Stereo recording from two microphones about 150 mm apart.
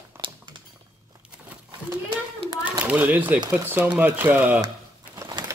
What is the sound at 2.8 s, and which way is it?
Speech, 10° right (ahead or behind).